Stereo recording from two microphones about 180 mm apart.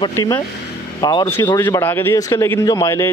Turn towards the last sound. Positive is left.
turn(degrees=20)  # may be behind; listen again after turning